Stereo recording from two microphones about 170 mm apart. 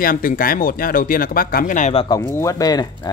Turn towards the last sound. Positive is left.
turn(degrees=20)  # may be behind; listen again after turning